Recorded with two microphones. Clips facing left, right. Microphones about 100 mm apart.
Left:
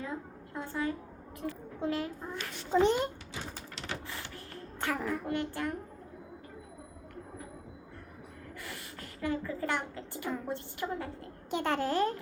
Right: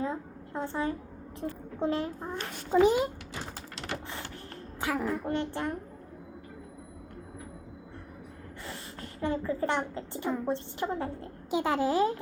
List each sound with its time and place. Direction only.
0.0 s a woman's voice: 25° right (ahead or behind)
2.4 s a child's voice: 55° right (ahead or behind)
2.8 s a child's voice: 5° right (ahead or behind)
4.8 s a child's voice: 5° right (ahead or behind)
5.2 s a child's voice: 25° right (ahead or behind)
8.6 s a woman's voice: 30° right (ahead or behind)
11.5 s a child's voice: 5° right (ahead or behind)